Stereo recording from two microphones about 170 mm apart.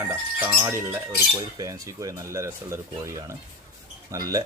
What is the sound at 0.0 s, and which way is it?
Speech, 10° right (ahead or behind).